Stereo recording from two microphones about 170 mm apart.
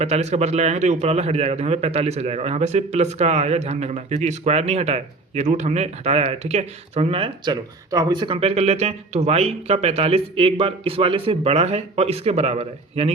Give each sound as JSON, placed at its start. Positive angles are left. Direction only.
{"t": 0.0, "sound": "a man's voice", "side_deg": -40}